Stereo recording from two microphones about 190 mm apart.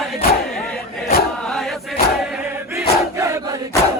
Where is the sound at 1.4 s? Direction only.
Centre (ahead or behind).